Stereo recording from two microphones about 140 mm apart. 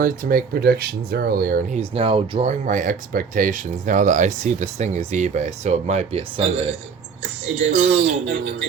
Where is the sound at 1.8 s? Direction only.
45° right (ahead or behind).